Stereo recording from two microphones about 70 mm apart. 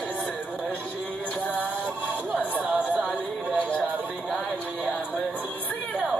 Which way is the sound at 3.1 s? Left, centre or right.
Left.